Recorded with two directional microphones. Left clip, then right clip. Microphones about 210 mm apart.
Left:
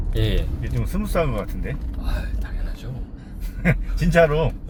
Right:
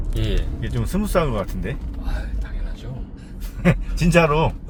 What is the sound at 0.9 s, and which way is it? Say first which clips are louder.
Speech: right 3 dB; 55° right (ahead or behind).